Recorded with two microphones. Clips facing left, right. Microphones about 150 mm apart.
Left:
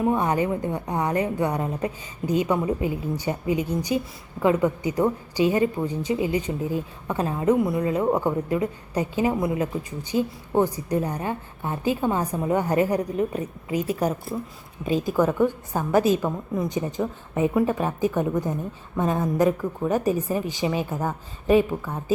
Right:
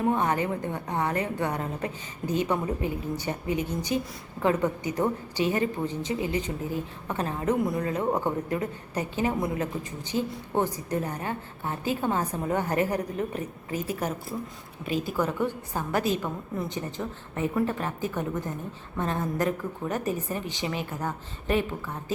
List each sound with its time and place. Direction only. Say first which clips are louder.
0.2 s a woman's voice: left 3 dB; 15° left (ahead or behind)
15.1 s a woman's voice: left 8 dB; 15° left (ahead or behind)